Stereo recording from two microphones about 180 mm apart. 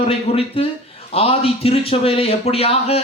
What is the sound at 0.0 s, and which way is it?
A man's voice, 35° left (ahead or behind).